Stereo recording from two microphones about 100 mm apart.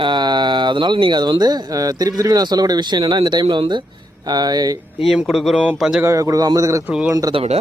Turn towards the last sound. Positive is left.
turn(degrees=-90)